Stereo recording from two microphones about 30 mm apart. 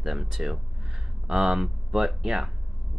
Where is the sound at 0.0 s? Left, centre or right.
Centre.